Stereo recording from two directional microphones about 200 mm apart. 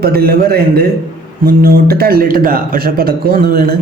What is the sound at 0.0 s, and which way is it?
Speech, 50° right (ahead or behind).